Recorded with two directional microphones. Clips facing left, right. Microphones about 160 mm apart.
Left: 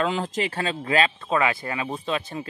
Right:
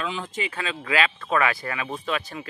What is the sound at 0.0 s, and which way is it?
Speech, 40° left (ahead or behind).